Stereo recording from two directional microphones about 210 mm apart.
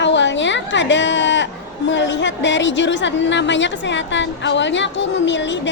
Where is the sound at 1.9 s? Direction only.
60° left (ahead or behind).